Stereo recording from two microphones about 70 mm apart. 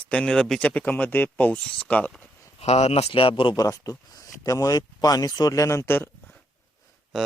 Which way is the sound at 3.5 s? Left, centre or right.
Left.